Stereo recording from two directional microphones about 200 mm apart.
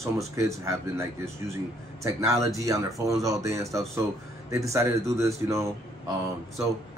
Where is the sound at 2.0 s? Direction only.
15° right (ahead or behind).